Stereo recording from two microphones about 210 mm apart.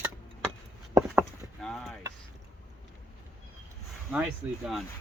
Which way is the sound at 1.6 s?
Centre (ahead or behind).